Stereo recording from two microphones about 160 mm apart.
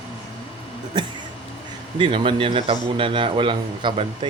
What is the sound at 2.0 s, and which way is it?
A man's voice, 30° right (ahead or behind).